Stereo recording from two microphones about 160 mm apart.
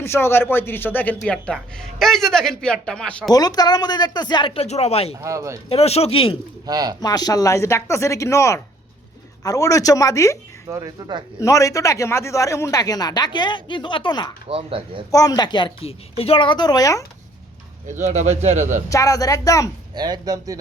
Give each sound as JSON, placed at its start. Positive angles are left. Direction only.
{"t": 0.0, "sound": "a man's voice", "side_deg": 15}
{"t": 3.3, "sound": "speech", "side_deg": 25}
{"t": 5.2, "sound": "speech", "side_deg": -20}
{"t": 5.6, "sound": "speech", "side_deg": 40}
{"t": 6.7, "sound": "speech", "side_deg": -25}
{"t": 7.0, "sound": "speech", "side_deg": 25}
{"t": 10.7, "sound": "speech", "side_deg": -25}
{"t": 11.3, "sound": "speech", "side_deg": 20}
{"t": 14.4, "sound": "speech", "side_deg": -35}
{"t": 15.1, "sound": "speech", "side_deg": 25}
{"t": 17.8, "sound": "speech", "side_deg": -50}
{"t": 18.9, "sound": "speech", "side_deg": 20}
{"t": 19.9, "sound": "speech", "side_deg": -25}